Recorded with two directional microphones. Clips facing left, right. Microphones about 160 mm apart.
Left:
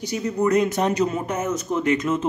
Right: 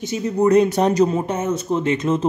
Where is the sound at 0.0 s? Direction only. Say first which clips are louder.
Right 4 dB; 25° right (ahead or behind).